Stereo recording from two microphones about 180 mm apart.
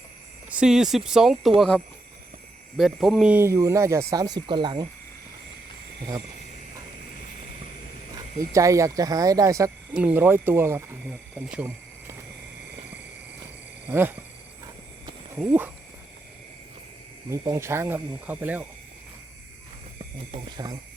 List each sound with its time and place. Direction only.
0.5 s speech: 5° right (ahead or behind)
2.7 s speech: centre (ahead or behind); by 4.9 s 25° right (ahead or behind)
8.5 s speech: 15° right (ahead or behind)
11.3 s a sound: 10° right (ahead or behind)
13.9 s speech: 15° right (ahead or behind)
15.4 s speech: 10° right (ahead or behind)
17.3 s speech: 15° right (ahead or behind)
20.3 s speech: 25° right (ahead or behind)